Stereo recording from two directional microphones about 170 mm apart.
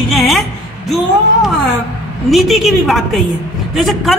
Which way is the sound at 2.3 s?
Centre (ahead or behind).